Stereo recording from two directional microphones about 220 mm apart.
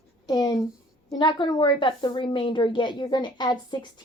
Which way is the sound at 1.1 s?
20° left (ahead or behind).